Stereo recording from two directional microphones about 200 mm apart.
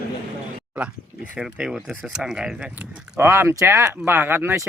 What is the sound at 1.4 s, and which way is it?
Speech, 5° right (ahead or behind).